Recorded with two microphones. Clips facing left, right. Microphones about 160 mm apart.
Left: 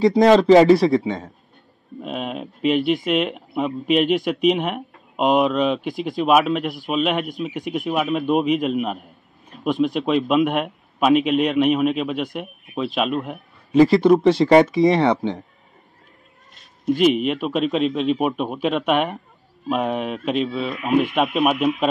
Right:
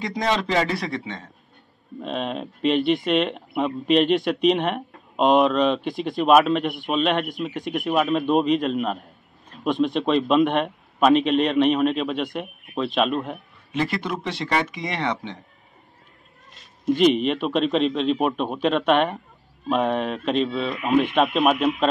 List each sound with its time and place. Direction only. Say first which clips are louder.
0.1 s speech: left 9 dB; 40° left (ahead or behind)
2.0 s speech: even; 5° left (ahead or behind)
9.5 s a sound: left 1 dB; 5° left (ahead or behind)
9.9 s a man's voice: right 2 dB; 10° left (ahead or behind)
13.7 s speech: left 13 dB; 35° left (ahead or behind)
17.0 s a man's voice: left 1 dB; 5° left (ahead or behind)